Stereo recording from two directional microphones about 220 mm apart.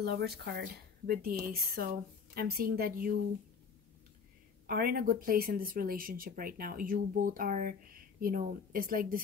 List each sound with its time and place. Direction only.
0.0 s speech: 45° right (ahead or behind)
4.6 s speech: 45° right (ahead or behind)